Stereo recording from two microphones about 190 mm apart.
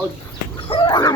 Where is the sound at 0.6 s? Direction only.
20° left (ahead or behind).